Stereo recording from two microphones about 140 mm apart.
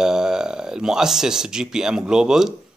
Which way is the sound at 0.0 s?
5° right (ahead or behind).